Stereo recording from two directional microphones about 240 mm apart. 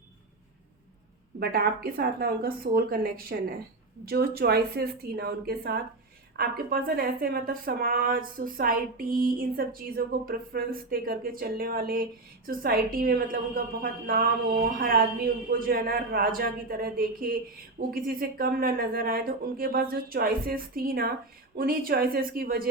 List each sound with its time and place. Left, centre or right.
1.4 s speech: right